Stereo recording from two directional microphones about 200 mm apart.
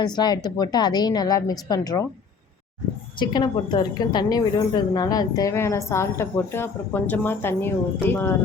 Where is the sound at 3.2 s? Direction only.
20° left (ahead or behind).